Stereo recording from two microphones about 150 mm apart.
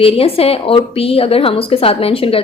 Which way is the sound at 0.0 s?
40° left (ahead or behind).